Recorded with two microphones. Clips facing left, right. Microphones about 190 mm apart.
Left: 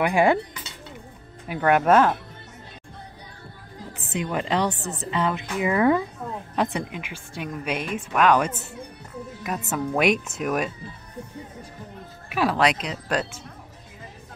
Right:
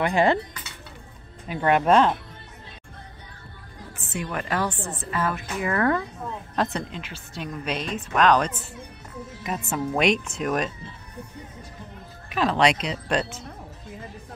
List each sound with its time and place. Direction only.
0.0 s a woman's voice: 10° left (ahead or behind)
1.5 s a woman's voice: 5° left (ahead or behind)
4.1 s a woman's voice: 20° left (ahead or behind)
9.7 s speech: 5° left (ahead or behind)
12.3 s speech: 10° left (ahead or behind)